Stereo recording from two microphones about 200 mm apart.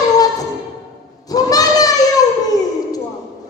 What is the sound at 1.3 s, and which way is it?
Child singing, 20° left (ahead or behind).